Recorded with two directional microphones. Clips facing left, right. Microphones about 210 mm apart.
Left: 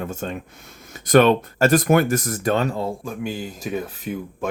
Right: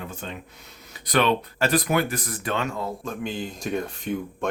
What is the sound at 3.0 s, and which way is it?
Speech, 10° left (ahead or behind).